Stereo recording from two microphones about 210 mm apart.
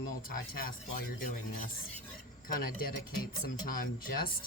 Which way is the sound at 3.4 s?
45° left (ahead or behind).